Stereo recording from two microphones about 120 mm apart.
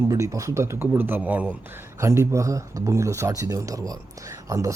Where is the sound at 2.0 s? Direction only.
25° right (ahead or behind).